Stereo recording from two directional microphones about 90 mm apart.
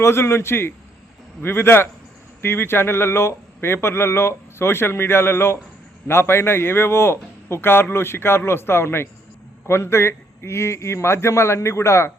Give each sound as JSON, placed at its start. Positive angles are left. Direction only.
{"t": 0.0, "sound": "a man's voice", "side_deg": 30}